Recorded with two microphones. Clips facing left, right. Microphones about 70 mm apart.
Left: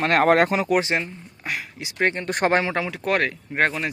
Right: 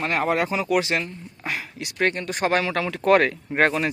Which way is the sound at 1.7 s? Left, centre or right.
Centre.